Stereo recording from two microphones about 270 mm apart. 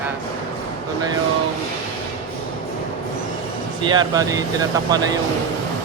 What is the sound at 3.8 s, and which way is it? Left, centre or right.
Speech, centre.